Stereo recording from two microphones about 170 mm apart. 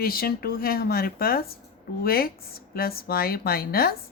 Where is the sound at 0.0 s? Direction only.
60° left (ahead or behind).